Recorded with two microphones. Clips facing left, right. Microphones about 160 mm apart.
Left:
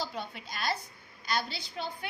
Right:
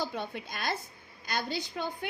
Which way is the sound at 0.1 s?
55° right (ahead or behind).